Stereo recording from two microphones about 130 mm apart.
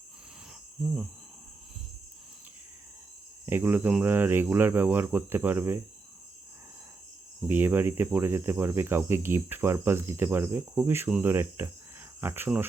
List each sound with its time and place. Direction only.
3.4 s speech: 15° right (ahead or behind)
7.4 s speech: 15° right (ahead or behind)